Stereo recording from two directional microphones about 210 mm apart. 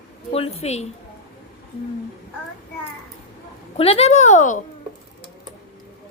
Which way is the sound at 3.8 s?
30° left (ahead or behind).